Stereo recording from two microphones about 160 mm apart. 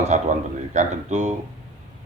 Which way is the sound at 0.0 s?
45° right (ahead or behind).